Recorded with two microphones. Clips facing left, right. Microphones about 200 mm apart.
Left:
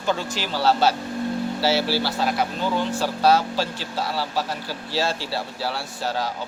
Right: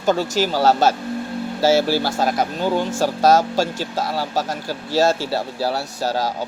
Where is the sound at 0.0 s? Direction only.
45° right (ahead or behind).